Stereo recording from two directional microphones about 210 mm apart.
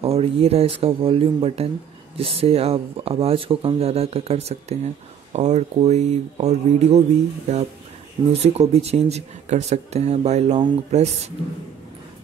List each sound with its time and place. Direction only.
0.0 s speech: 30° right (ahead or behind)